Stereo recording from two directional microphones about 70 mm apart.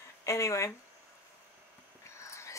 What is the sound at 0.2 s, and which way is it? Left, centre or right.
Speech, left.